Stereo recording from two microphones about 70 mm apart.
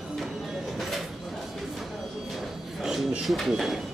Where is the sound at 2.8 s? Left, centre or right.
Centre.